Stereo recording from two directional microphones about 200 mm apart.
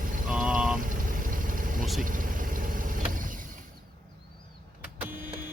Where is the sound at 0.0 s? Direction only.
40° right (ahead or behind).